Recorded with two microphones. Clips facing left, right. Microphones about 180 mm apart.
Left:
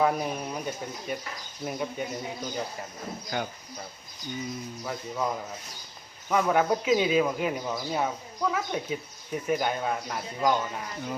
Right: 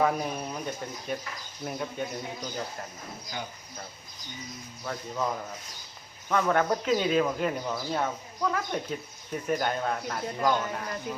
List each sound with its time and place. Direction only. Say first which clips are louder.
0.0 s speech: left 1 dB; 5° left (ahead or behind)
3.3 s speech: left 6 dB; 60° left (ahead or behind)
4.9 s a man's voice: even; 5° left (ahead or behind)